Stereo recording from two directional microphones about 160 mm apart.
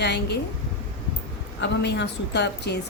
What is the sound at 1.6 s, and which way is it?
A woman's voice, 90° left.